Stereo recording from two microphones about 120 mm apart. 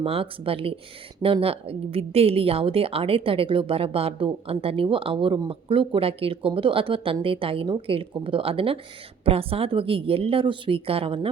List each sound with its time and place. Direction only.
0.0 s a woman's voice: 50° right (ahead or behind)